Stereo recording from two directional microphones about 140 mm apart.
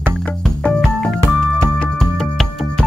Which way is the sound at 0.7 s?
5° left (ahead or behind).